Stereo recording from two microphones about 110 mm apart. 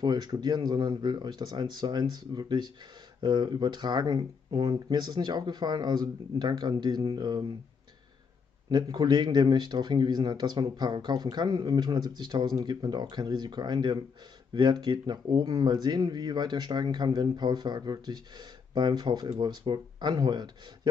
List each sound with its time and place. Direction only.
0.0 s speech: 40° right (ahead or behind)
8.6 s speech: 40° right (ahead or behind)